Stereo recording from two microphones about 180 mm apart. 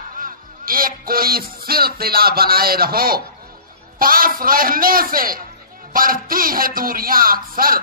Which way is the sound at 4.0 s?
50° right (ahead or behind).